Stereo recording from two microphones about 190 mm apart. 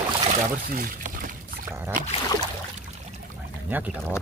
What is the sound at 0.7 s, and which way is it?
Pour, 45° right (ahead or behind).